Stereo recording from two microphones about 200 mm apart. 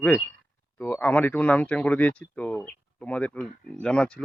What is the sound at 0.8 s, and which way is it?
Speech, 10° left (ahead or behind).